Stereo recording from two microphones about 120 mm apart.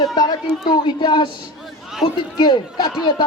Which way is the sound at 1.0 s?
40° left (ahead or behind).